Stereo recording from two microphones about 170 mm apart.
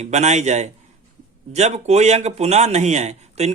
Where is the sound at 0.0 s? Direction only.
40° right (ahead or behind).